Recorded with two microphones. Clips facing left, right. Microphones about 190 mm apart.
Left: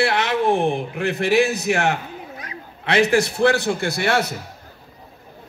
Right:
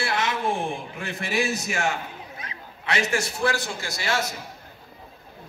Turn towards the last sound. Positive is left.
turn(degrees=60)  # may be behind; listen again after turning